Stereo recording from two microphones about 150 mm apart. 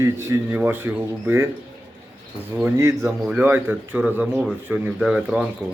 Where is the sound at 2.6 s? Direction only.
20° right (ahead or behind).